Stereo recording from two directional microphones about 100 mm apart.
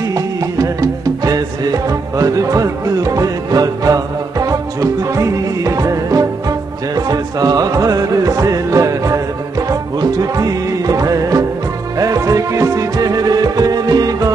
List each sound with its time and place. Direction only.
0.1 s music: 35° right (ahead or behind)